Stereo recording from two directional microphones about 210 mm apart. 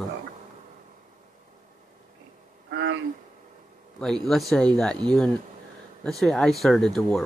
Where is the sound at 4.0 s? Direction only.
Centre (ahead or behind).